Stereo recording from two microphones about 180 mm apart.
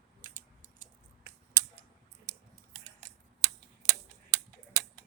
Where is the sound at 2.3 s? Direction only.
15° right (ahead or behind).